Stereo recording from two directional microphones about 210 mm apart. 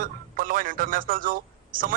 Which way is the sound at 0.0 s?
40° right (ahead or behind).